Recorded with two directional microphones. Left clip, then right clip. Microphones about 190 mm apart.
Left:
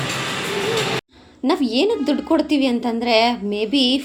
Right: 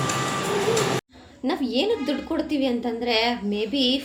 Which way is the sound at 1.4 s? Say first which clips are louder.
Left 5 dB; 40° left (ahead or behind).